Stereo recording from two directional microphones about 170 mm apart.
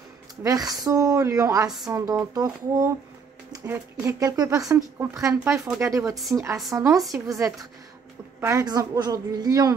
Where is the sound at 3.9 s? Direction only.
20° right (ahead or behind).